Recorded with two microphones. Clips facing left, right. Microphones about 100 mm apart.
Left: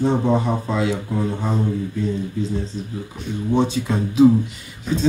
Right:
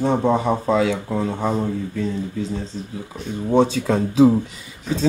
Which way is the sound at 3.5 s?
80° right.